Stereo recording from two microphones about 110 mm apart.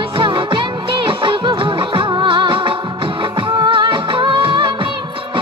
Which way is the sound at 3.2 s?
50° right (ahead or behind).